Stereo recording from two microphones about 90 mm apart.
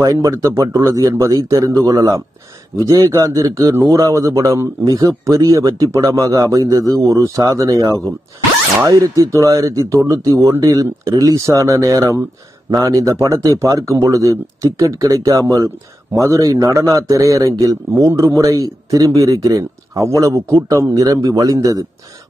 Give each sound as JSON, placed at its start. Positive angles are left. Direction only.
{"t": 0.0, "sound": "a man's voice", "side_deg": -40}